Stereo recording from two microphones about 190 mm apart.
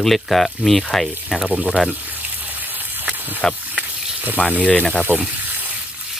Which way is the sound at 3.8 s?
5° right (ahead or behind).